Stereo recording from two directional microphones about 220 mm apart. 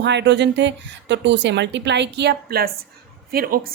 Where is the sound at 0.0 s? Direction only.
50° right (ahead or behind).